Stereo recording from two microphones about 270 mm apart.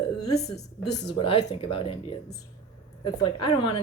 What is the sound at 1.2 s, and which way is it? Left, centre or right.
A woman's voice, centre.